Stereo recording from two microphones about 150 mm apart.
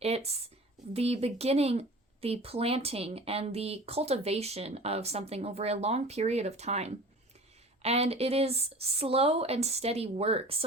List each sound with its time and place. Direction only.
0.0 s a woman's voice: 45° right (ahead or behind)